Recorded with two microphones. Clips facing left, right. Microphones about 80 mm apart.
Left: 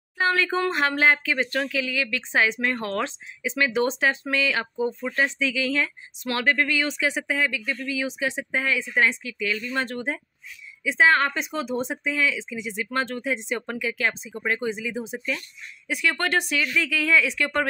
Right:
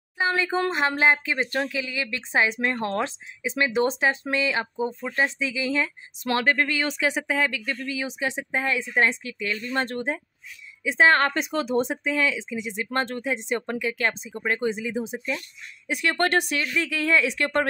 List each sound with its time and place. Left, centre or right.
0.2 s a sound: centre
0.7 s speech: centre
7.3 s speech: right
15.0 s speech: centre
15.9 s speech: right